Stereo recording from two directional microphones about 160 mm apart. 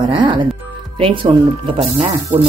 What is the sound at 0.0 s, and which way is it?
Speech, 30° right (ahead or behind).